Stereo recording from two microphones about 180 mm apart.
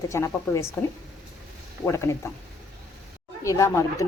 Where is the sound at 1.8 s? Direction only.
15° left (ahead or behind).